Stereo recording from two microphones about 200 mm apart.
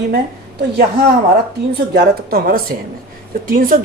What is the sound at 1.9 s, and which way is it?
Speech, 50° right (ahead or behind).